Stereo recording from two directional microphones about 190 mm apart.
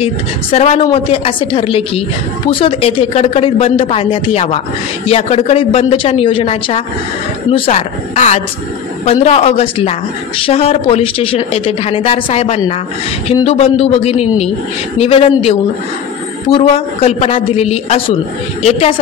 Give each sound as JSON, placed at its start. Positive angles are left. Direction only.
{"t": 0.0, "sound": "a woman's voice", "side_deg": 30}